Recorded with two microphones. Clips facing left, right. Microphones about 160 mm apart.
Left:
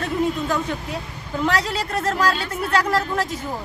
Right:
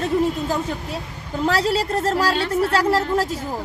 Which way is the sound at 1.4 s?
35° right (ahead or behind).